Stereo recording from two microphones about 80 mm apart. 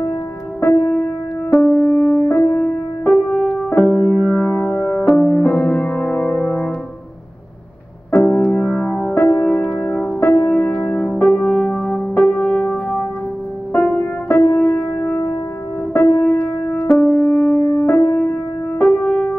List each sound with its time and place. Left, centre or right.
0.6 s music: left
3.1 s music: centre
3.9 s music: left
8.2 s music: left